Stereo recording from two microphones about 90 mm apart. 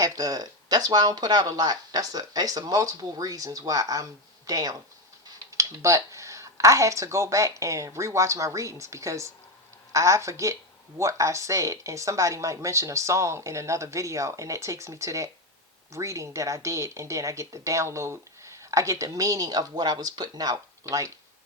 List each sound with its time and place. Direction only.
0.0 s speech: 45° right (ahead or behind)